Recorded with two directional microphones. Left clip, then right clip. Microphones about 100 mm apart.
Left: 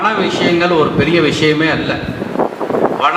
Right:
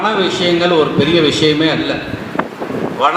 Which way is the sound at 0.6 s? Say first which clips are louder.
Right 1 dB; 40° left (ahead or behind).